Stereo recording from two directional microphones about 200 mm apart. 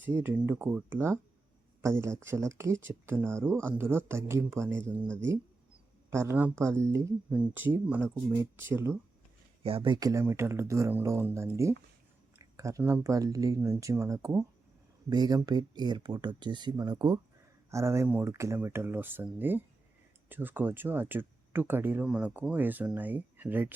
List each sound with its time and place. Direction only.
0.0 s speech: 10° right (ahead or behind)
6.1 s speech: 15° right (ahead or behind)
9.6 s speech: 25° right (ahead or behind); by 23.7 s 10° right (ahead or behind)